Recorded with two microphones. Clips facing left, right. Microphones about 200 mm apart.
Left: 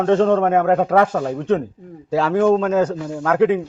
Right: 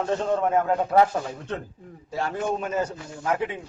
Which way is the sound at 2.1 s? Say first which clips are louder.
Left 12 dB; 90° left.